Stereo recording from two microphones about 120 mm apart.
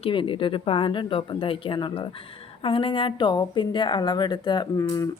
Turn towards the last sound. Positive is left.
turn(degrees=30)  # may be behind; listen again after turning